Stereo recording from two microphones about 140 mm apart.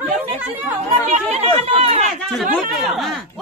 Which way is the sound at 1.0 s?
55° right (ahead or behind).